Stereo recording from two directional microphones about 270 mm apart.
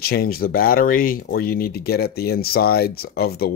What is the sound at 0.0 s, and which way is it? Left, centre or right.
Speech, left.